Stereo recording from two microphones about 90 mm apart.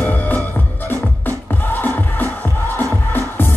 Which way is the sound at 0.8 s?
20° left (ahead or behind).